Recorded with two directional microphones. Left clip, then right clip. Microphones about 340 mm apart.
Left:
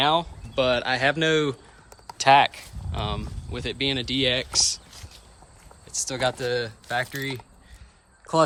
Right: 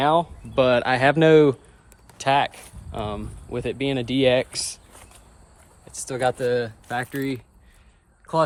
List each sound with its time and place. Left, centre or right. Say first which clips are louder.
0.0 s speech: right 2 dB; centre
0.5 s speech: right 4 dB; centre
2.1 s speech: left 4 dB; centre